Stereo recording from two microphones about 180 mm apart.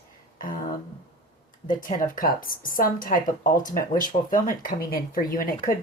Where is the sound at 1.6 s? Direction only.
50° left (ahead or behind).